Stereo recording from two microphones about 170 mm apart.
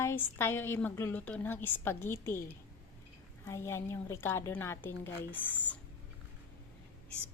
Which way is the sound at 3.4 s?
15° left (ahead or behind).